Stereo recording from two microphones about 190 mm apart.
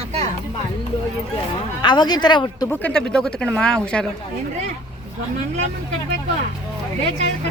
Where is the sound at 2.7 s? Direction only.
5° left (ahead or behind).